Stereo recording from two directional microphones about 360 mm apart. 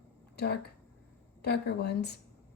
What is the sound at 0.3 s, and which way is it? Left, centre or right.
Speech, left.